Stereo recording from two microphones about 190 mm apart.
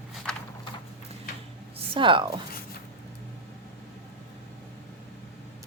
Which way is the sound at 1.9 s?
25° right (ahead or behind).